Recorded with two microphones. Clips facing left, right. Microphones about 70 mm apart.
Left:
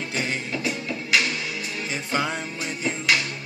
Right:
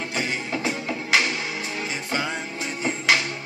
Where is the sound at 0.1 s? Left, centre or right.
Right.